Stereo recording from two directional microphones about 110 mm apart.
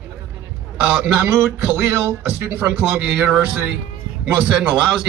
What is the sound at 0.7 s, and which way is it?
Speech, 10° right (ahead or behind).